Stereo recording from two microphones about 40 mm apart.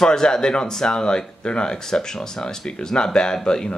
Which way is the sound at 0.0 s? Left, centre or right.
Centre.